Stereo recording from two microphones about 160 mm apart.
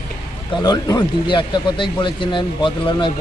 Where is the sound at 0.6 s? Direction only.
25° left (ahead or behind).